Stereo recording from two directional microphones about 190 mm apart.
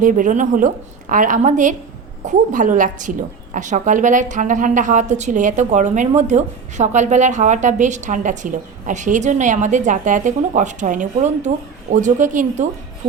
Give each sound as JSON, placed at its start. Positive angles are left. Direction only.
{"t": 0.0, "sound": "a woman's voice", "side_deg": -45}